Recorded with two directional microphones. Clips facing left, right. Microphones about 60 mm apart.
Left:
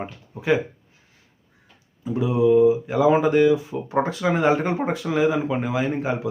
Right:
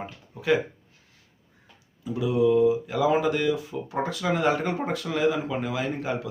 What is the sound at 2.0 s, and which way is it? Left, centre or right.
Speech, left.